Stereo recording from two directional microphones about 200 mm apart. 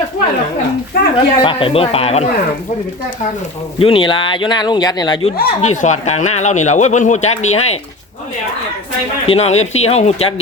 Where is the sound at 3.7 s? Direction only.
25° left (ahead or behind).